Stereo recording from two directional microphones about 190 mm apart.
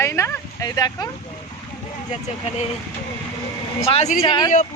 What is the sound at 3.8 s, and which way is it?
Speech, 30° left (ahead or behind).